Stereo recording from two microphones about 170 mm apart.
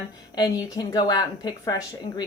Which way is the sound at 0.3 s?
20° left (ahead or behind).